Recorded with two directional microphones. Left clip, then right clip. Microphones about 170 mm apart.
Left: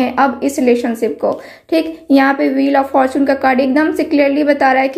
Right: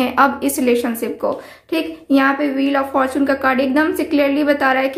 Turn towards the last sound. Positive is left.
turn(degrees=20)  # may be behind; listen again after turning